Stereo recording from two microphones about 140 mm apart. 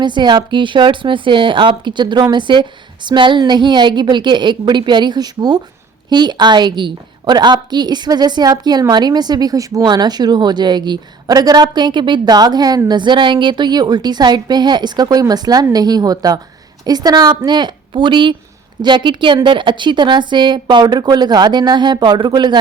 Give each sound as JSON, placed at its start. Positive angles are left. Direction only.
{"t": 0.0, "sound": "a woman's voice", "side_deg": -30}